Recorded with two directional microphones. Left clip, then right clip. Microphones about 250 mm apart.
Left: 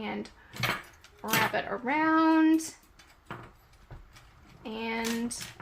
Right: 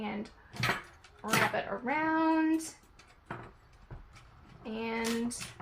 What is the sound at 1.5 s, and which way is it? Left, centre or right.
Speech, left.